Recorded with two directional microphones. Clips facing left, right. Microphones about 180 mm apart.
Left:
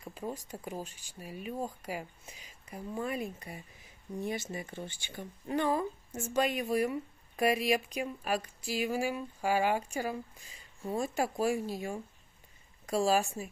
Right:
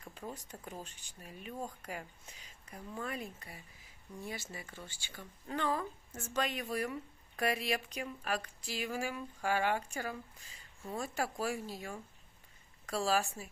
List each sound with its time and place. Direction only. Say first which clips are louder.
0.3 s speech: left 7 dB; 10° left (ahead or behind)
12.8 s speech: left 5 dB; 15° left (ahead or behind)